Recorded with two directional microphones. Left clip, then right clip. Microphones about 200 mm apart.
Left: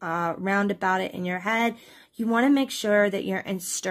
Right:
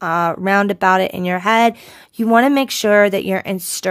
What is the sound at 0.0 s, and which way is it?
Speech, 45° right (ahead or behind).